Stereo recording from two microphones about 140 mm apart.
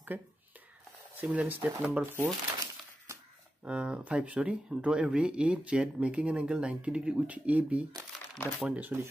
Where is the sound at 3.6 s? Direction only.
10° right (ahead or behind).